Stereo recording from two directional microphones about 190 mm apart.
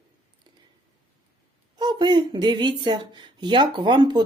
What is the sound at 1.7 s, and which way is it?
Speech, 25° right (ahead or behind).